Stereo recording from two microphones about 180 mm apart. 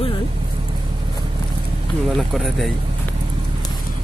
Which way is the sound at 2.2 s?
Centre (ahead or behind).